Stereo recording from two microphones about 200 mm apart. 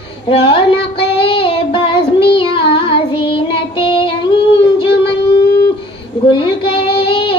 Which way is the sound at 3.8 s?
25° left (ahead or behind).